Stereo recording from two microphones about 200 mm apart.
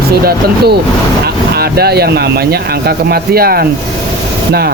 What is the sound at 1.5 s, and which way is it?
Speech, 50° right (ahead or behind).